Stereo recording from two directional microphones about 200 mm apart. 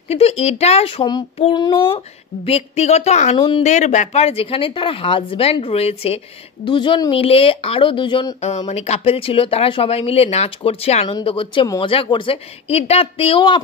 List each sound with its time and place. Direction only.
0.1 s a child's voice: 30° left (ahead or behind)